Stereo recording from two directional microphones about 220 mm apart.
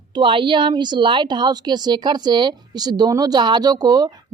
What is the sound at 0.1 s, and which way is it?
A woman's voice, 20° right (ahead or behind).